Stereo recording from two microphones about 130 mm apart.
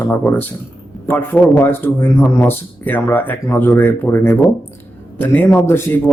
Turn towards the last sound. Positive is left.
turn(degrees=15)  # may be behind; listen again after turning